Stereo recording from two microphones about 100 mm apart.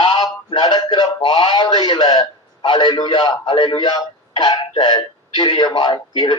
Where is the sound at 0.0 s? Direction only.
45° left (ahead or behind).